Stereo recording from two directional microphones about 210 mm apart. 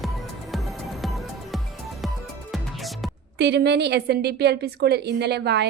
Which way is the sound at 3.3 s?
55° right (ahead or behind).